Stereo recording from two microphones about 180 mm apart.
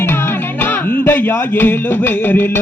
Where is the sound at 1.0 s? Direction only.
10° left (ahead or behind).